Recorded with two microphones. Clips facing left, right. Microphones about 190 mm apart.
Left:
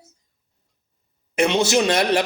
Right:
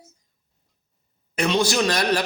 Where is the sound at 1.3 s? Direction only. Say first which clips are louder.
Left 3 dB; 25° left (ahead or behind).